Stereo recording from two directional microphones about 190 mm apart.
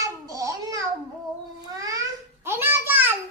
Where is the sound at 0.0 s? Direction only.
15° right (ahead or behind).